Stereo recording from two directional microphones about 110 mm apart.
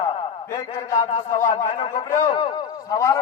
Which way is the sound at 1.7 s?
45° left (ahead or behind).